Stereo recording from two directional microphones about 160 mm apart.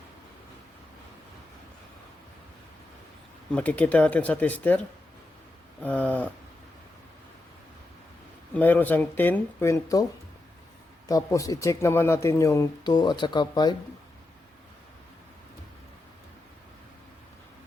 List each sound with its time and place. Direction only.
3.5 s speech: 10° left (ahead or behind)
5.8 s a sound: 10° left (ahead or behind)
8.5 s speech: 10° left (ahead or behind)
11.1 s speech: 20° left (ahead or behind)